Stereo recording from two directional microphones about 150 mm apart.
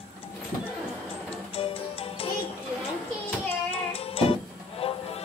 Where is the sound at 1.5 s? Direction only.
40° left (ahead or behind).